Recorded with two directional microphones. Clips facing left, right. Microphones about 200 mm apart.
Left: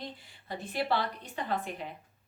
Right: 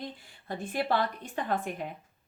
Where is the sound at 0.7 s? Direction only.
50° right (ahead or behind).